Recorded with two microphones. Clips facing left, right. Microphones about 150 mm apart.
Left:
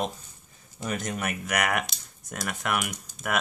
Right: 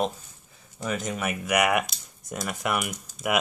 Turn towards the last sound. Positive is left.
turn(degrees=-5)  # may be behind; listen again after turning